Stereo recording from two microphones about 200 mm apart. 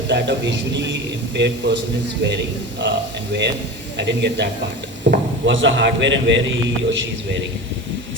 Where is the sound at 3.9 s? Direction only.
60° right (ahead or behind).